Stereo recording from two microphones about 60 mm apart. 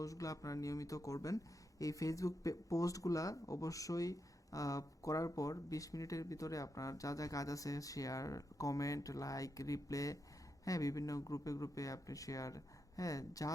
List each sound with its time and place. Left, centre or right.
0.0 s speech: left